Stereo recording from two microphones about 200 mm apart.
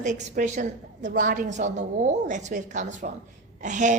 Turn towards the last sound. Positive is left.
turn(degrees=-40)  # may be behind; listen again after turning